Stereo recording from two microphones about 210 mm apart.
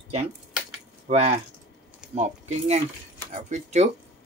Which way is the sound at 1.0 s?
30° right (ahead or behind).